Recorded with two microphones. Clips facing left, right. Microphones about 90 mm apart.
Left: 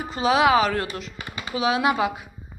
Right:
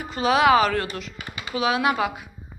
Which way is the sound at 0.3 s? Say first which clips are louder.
Right 1 dB; 5° left (ahead or behind).